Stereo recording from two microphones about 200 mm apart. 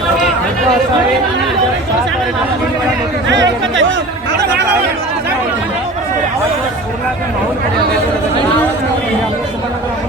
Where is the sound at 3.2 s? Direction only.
65° right (ahead or behind).